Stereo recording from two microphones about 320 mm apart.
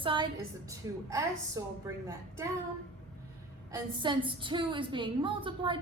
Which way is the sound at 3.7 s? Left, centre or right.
Centre.